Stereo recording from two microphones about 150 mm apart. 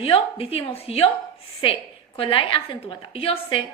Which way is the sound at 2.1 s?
35° left (ahead or behind).